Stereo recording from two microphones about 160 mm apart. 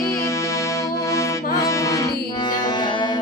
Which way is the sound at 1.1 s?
20° left (ahead or behind).